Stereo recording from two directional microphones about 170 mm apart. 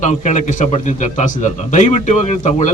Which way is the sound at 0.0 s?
45° left (ahead or behind).